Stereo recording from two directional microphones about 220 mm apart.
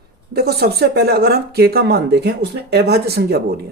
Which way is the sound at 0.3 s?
45° right (ahead or behind).